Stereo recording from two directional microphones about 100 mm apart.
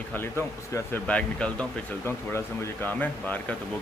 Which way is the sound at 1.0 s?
10° left (ahead or behind).